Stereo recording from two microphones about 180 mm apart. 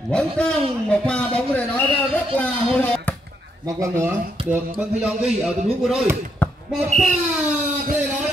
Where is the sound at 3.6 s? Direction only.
20° right (ahead or behind).